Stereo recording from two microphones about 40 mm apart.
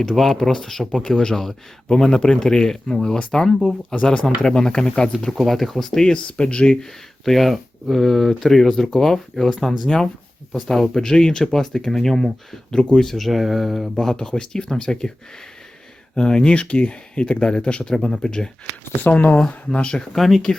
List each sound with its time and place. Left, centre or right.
0.1 s speech: centre
4.0 s speech: left
5.4 s speech: centre; by 6.7 s left
7.3 s speech: centre
13.2 s speech: centre
13.9 s speech: centre
16.1 s speech: centre
16.6 s speech: left
17.9 s speech: centre
19.1 s speech: left
20.1 s speech: centre